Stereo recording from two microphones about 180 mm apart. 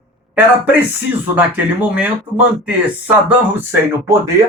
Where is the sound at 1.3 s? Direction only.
10° right (ahead or behind).